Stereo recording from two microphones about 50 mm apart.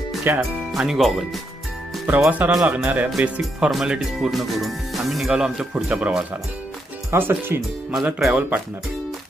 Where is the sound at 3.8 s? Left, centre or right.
Centre.